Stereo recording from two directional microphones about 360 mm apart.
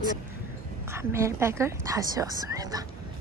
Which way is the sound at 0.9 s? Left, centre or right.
Centre.